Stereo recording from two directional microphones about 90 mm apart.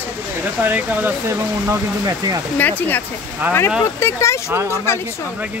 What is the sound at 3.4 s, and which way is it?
Speech, 20° right (ahead or behind).